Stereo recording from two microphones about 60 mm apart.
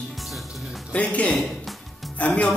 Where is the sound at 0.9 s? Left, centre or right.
Left.